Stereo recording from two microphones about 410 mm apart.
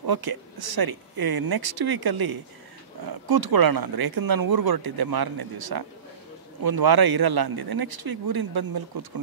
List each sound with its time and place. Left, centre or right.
0.0 s speech: right